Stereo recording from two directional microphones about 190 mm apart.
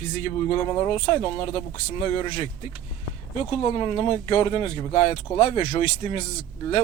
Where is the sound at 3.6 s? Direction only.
25° left (ahead or behind).